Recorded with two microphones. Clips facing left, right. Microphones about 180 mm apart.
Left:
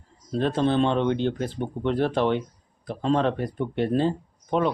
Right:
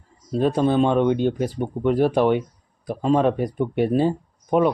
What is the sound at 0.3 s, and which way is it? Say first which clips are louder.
Speech: right 3 dB; 10° right (ahead or behind).